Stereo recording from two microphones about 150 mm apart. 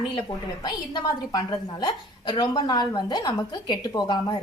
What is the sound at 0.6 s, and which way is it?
A woman's voice, 30° left (ahead or behind).